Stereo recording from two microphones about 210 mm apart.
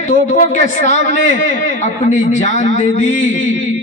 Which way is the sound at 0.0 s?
35° left (ahead or behind).